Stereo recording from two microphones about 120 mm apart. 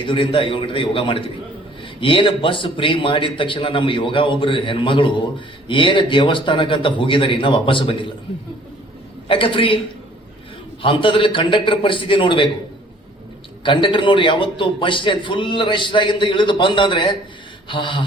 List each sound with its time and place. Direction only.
0.0 s a man's voice: 45° left (ahead or behind)
9.2 s a man's voice: 45° left (ahead or behind)
10.8 s a man's voice: 45° left (ahead or behind)
13.7 s a man's voice: 45° left (ahead or behind)